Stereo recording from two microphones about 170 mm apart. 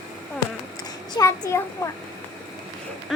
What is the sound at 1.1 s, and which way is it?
Speech, 20° left (ahead or behind).